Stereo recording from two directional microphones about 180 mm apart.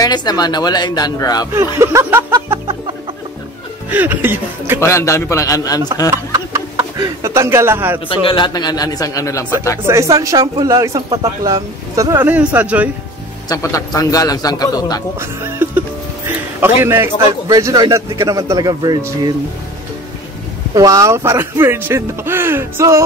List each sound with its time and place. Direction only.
0.0 s a man's voice: 25° left (ahead or behind)
1.5 s speech: 15° right (ahead or behind)
3.9 s speech: 10° right (ahead or behind)
4.7 s a man's voice: 15° left (ahead or behind)
6.0 s speech: 15° right (ahead or behind)
8.1 s a man's voice: 30° left (ahead or behind)
9.4 s speech: 10° right (ahead or behind)
13.5 s a man's voice: 20° left (ahead or behind)
15.1 s speech: 10° right (ahead or behind)
16.8 s a man's voice: 15° right (ahead or behind)
20.7 s speech: 20° right (ahead or behind)